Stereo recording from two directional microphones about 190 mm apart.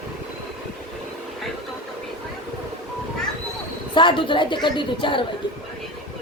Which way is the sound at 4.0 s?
25° left (ahead or behind).